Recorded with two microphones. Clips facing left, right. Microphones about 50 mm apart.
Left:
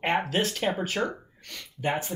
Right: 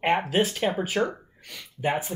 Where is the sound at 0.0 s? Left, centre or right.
Centre.